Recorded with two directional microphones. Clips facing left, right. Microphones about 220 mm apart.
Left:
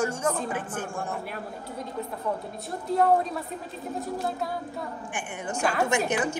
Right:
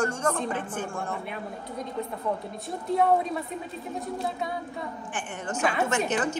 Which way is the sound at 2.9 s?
Centre (ahead or behind).